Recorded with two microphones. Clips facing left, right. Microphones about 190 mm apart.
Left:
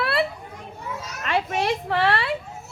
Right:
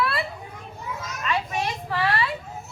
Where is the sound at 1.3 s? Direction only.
55° left (ahead or behind).